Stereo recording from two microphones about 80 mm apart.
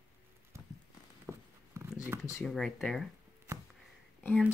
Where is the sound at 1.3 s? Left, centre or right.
Left.